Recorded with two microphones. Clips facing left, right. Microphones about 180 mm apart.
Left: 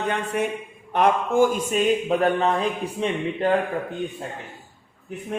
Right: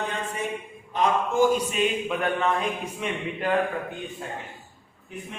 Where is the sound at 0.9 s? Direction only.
55° left (ahead or behind); by 3.5 s 30° left (ahead or behind).